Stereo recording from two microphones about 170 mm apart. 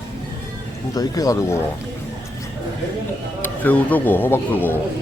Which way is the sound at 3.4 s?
10° left (ahead or behind).